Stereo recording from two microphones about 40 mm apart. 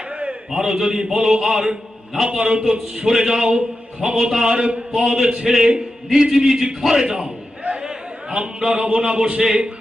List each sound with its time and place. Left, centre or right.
0.1 s a sound: right
0.5 s a man's voice: centre
5.0 s a man's voice: centre